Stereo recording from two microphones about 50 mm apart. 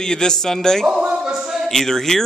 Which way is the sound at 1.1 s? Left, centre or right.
Centre.